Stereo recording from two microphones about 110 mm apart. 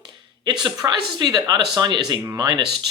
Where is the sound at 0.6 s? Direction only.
40° right (ahead or behind).